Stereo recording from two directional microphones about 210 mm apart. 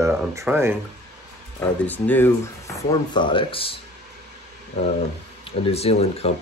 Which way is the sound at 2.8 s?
20° left (ahead or behind).